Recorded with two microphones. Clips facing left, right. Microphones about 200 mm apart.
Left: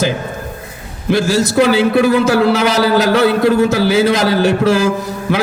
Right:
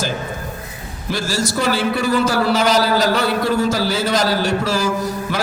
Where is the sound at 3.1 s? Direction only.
60° left (ahead or behind).